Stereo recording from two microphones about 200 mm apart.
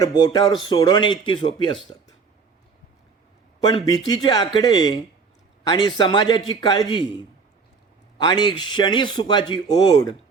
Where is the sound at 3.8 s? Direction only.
20° left (ahead or behind).